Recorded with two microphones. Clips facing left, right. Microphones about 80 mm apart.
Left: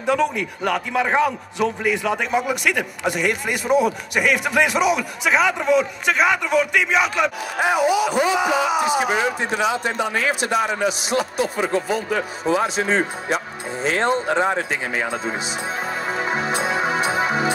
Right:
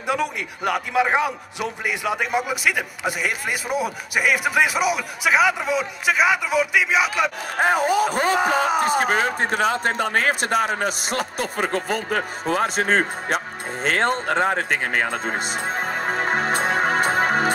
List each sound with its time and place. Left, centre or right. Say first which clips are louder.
0.0 s a man's voice: left 4 dB; centre
7.6 s speech: left 1 dB; right
13.8 s music: left 1 dB; right